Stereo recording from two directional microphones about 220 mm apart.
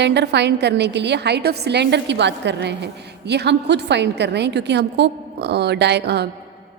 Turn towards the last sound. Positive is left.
turn(degrees=-50)  # may be behind; listen again after turning